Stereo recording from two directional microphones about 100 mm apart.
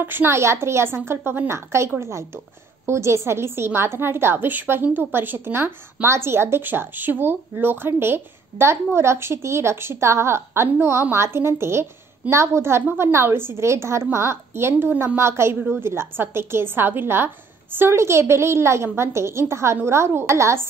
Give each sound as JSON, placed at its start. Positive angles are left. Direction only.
{"t": 0.0, "sound": "a woman's voice", "side_deg": -20}